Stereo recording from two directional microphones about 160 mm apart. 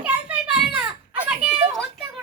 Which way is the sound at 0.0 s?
10° right (ahead or behind).